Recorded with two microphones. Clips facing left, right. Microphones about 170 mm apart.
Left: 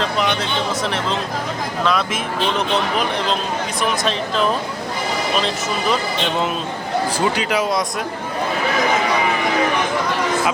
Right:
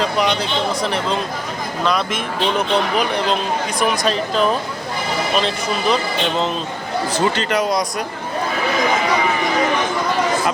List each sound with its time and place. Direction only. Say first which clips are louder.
1.8 s speech: even; centre (ahead or behind)
3.8 s speech: right 2 dB; centre (ahead or behind)
7.3 s speech: right 1 dB; 5° left (ahead or behind)